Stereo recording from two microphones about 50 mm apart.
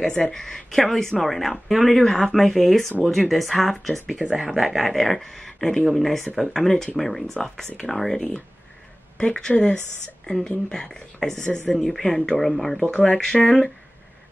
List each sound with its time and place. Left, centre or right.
0.0 s speech: centre
2.0 s speech: centre
4.2 s speech: centre
9.2 s speech: centre
10.7 s speech: centre
12.9 s speech: centre